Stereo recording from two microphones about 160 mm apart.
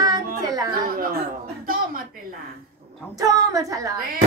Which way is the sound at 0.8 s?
65° right (ahead or behind).